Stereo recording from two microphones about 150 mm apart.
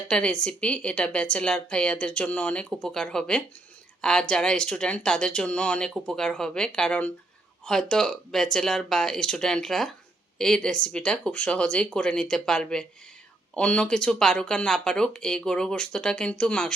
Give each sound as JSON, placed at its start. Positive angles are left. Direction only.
{"t": 0.1, "sound": "speech", "side_deg": 5}